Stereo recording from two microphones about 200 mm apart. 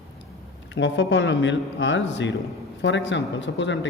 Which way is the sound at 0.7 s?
65° left (ahead or behind).